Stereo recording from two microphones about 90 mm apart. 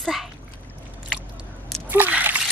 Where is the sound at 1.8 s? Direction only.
20° right (ahead or behind).